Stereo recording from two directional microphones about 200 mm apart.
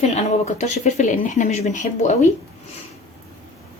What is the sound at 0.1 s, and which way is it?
Speech, 35° left (ahead or behind).